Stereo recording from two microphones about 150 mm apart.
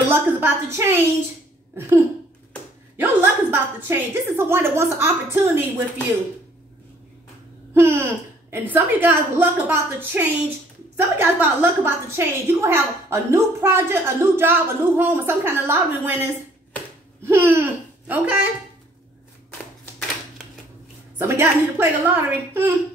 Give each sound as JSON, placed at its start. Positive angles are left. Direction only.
{"t": 0.1, "sound": "a woman's voice", "side_deg": -15}
{"t": 3.0, "sound": "a woman's voice", "side_deg": -10}
{"t": 7.7, "sound": "a woman's voice", "side_deg": -15}
{"t": 17.2, "sound": "speech", "side_deg": -15}
{"t": 21.2, "sound": "a woman's voice", "side_deg": -15}